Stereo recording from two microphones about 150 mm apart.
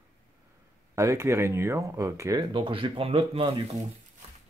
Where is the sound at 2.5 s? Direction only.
35° right (ahead or behind).